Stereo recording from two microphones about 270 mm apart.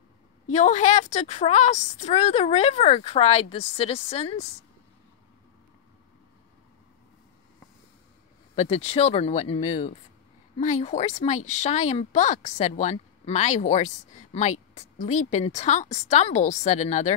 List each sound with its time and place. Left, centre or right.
0.5 s speech: left
8.5 s speech: left